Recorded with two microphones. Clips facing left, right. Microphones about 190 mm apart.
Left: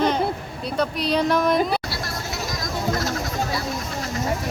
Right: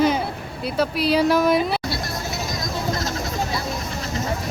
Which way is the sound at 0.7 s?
5° right (ahead or behind).